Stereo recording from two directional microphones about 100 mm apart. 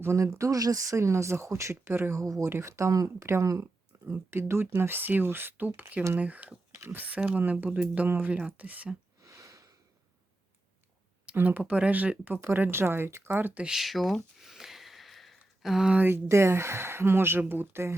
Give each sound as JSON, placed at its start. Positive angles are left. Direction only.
{"t": 0.0, "sound": "speech", "side_deg": -30}
{"t": 9.2, "sound": "a sound", "side_deg": -30}
{"t": 11.3, "sound": "speech", "side_deg": -15}
{"t": 16.0, "sound": "speech", "side_deg": -25}